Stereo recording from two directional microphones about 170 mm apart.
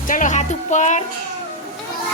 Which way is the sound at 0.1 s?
50° left (ahead or behind).